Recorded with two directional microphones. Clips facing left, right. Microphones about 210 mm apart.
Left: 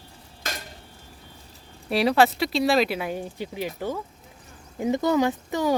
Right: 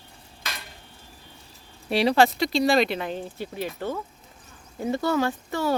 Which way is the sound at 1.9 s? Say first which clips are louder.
Even; centre (ahead or behind).